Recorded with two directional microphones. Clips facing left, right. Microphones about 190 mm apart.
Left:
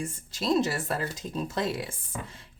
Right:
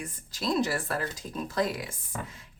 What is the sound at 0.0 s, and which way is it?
A woman's voice, 25° left (ahead or behind).